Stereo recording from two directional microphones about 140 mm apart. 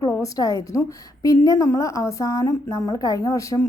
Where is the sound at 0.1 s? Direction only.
25° left (ahead or behind).